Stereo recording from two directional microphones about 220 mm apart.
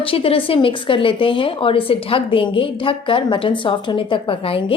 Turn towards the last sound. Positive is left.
turn(degrees=25)  # may be behind; listen again after turning